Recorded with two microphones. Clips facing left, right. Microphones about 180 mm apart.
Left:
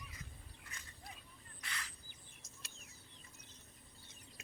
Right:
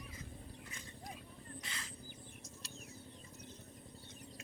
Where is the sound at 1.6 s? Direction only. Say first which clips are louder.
Left 4 dB; 25° right (ahead or behind).